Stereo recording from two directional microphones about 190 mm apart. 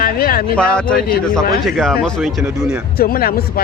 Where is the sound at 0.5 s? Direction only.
5° left (ahead or behind).